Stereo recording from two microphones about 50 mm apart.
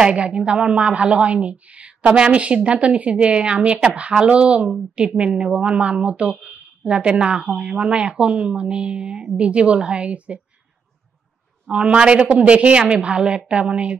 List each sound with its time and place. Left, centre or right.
0.0 s a woman's voice: right
11.7 s a woman's voice: centre